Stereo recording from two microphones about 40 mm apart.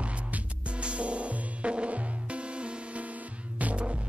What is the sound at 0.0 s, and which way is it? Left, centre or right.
Music, right.